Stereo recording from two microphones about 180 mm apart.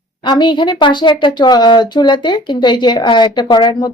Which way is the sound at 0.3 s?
25° left (ahead or behind).